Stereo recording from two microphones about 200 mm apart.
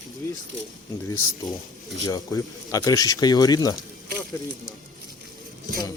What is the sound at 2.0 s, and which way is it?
Speech, 15° left (ahead or behind).